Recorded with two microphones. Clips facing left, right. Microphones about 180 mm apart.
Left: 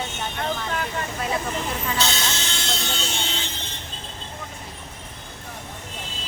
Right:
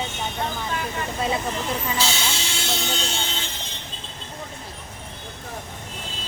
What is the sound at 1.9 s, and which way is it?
Train, 10° right (ahead or behind).